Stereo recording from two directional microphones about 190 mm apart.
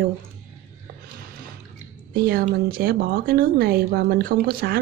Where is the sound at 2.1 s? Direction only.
50° right (ahead or behind).